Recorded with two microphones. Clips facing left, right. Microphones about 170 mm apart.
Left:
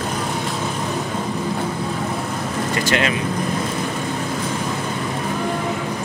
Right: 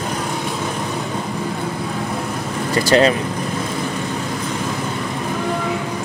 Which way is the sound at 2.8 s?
35° right (ahead or behind).